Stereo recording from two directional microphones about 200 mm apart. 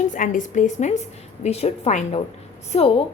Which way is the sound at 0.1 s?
40° left (ahead or behind).